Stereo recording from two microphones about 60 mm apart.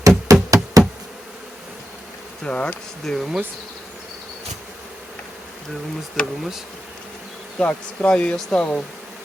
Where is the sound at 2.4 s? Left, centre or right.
Centre.